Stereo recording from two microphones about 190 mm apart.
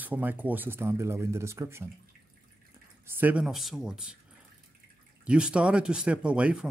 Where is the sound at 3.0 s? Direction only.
10° right (ahead or behind).